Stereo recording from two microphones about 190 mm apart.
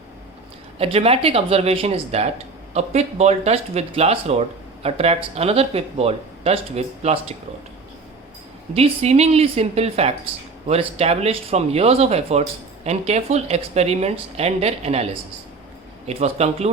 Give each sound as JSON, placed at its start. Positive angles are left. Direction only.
{"t": 0.8, "sound": "speech", "side_deg": -30}
{"t": 8.7, "sound": "speech", "side_deg": -35}